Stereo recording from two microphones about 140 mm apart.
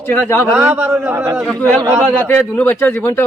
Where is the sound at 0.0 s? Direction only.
15° left (ahead or behind).